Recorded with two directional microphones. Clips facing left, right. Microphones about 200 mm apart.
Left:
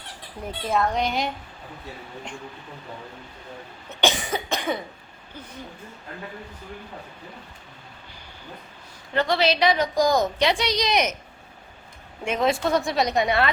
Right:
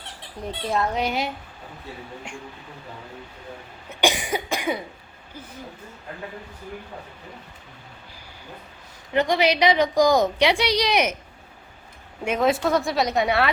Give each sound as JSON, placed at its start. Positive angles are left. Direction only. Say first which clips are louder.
{"t": 0.7, "sound": "a woman's voice", "louder": "left 1 dB", "side_deg": -5}
{"t": 3.8, "sound": "cough", "louder": "right 1 dB", "side_deg": -15}
{"t": 9.1, "sound": "a woman's voice", "louder": "right 2 dB", "side_deg": -15}
{"t": 12.2, "sound": "a woman's voice", "louder": "right 2 dB", "side_deg": -5}